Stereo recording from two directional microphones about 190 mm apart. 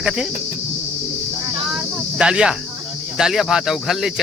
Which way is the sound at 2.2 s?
5° right (ahead or behind).